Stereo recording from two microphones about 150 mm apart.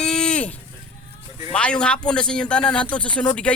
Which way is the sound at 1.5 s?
5° left (ahead or behind).